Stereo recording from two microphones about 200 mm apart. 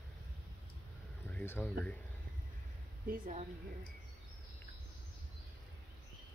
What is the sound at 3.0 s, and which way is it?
Speech, 45° right (ahead or behind).